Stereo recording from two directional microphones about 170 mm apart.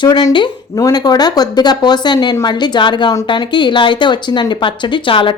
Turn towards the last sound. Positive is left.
turn(degrees=30)  # may be behind; listen again after turning